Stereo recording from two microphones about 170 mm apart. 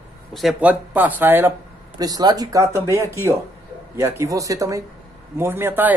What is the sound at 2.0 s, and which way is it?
A man's voice, 20° right (ahead or behind).